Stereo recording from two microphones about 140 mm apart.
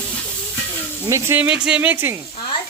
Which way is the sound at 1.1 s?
15° right (ahead or behind).